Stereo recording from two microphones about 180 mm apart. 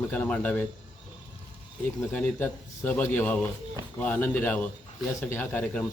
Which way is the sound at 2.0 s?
10° left (ahead or behind).